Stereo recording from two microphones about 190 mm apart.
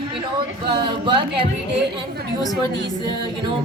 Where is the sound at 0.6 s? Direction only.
25° right (ahead or behind).